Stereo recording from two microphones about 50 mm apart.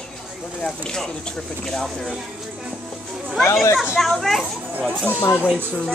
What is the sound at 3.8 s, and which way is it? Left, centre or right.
Speech, centre.